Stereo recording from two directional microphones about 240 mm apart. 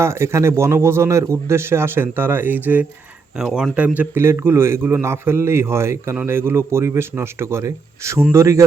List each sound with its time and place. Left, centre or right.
0.0 s a man's voice: centre